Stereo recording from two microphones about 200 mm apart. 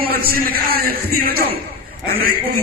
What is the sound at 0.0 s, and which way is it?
Music, 50° right (ahead or behind).